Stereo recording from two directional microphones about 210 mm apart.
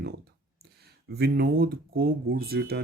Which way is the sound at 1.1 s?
50° right (ahead or behind).